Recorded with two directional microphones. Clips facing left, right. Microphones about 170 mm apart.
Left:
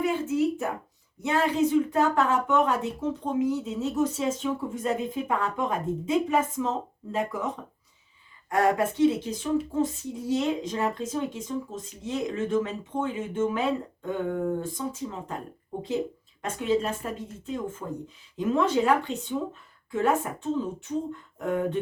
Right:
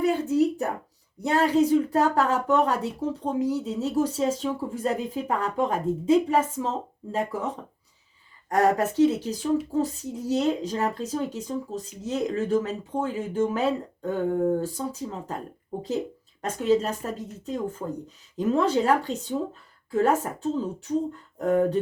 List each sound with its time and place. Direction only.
0.0 s speech: 35° right (ahead or behind)
1.9 s speech: 35° right (ahead or behind)
16.4 s speech: 40° right (ahead or behind)
21.3 s a sound: 35° right (ahead or behind)